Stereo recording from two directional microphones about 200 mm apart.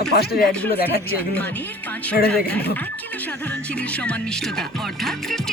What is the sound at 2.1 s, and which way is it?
Speech, 50° left (ahead or behind).